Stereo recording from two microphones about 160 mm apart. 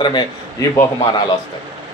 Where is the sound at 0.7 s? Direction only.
20° left (ahead or behind).